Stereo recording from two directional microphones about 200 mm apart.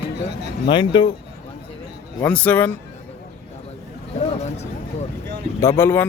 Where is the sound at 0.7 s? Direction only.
25° left (ahead or behind).